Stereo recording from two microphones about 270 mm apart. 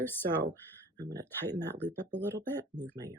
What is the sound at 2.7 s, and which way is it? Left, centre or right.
Speech, right.